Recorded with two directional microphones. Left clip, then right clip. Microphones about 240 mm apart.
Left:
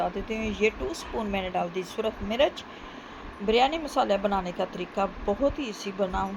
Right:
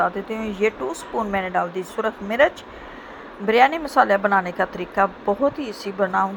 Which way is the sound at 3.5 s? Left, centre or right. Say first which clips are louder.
Right 7 dB; right.